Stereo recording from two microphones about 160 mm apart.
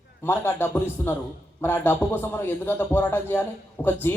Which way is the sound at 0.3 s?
15° left (ahead or behind).